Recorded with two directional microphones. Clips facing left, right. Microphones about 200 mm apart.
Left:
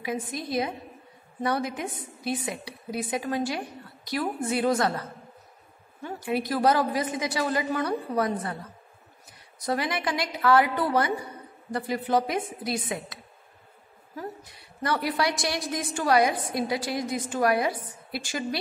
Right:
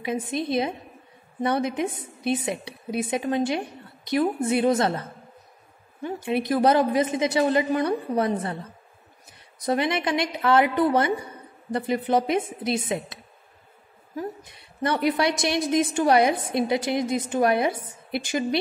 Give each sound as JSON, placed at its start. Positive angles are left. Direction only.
{"t": 0.0, "sound": "a woman's voice", "side_deg": -25}
{"t": 6.2, "sound": "a woman's voice", "side_deg": -20}
{"t": 9.7, "sound": "a woman's voice", "side_deg": -25}